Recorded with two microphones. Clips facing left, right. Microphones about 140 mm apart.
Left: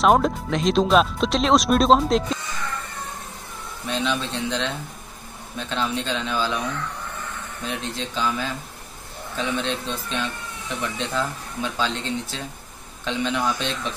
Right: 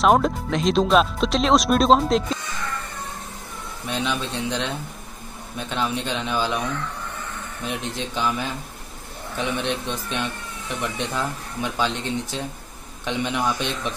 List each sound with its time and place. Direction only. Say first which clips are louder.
0.0 s speech: even; centre (ahead or behind)
3.9 s speech: left 1 dB; 15° right (ahead or behind)
7.6 s speech: right 1 dB; 15° right (ahead or behind)